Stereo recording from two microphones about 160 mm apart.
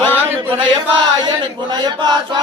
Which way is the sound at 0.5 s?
30° right (ahead or behind).